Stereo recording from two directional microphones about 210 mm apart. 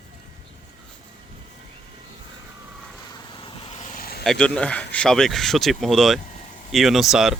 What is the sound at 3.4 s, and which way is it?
Vehicle, 30° left (ahead or behind).